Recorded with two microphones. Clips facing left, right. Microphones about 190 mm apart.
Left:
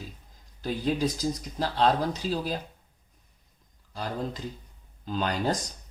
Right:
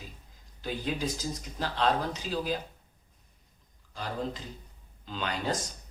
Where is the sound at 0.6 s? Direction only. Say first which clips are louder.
Left 5 dB; 40° left (ahead or behind).